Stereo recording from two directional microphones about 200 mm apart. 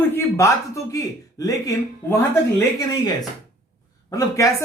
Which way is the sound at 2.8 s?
20° left (ahead or behind).